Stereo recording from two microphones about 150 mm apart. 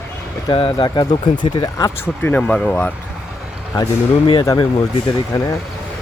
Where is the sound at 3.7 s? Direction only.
30° left (ahead or behind).